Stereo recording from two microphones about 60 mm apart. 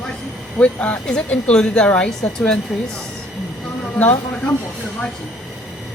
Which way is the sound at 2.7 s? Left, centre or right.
Centre.